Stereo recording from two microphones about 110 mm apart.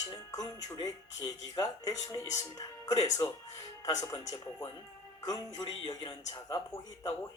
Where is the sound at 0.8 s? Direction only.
40° left (ahead or behind).